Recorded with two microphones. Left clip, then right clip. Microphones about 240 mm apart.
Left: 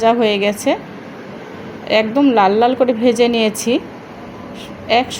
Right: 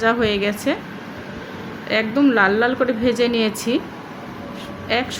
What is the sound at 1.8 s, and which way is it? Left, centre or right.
A woman's voice, centre.